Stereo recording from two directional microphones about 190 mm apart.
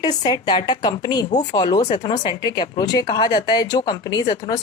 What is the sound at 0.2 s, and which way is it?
A woman's voice, 25° left (ahead or behind).